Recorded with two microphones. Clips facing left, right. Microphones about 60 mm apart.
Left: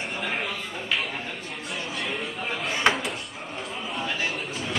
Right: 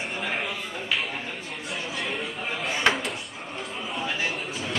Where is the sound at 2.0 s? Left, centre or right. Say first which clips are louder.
Left 1 dB; centre.